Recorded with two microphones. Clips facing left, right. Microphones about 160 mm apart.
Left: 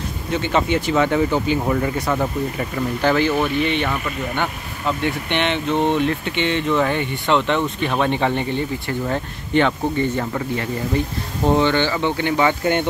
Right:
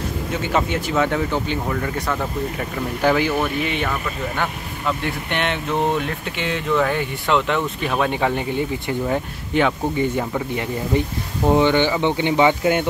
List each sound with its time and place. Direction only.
0.3 s speech: 5° right (ahead or behind)
1.7 s speech: 15° left (ahead or behind)
3.0 s speech: 10° right (ahead or behind)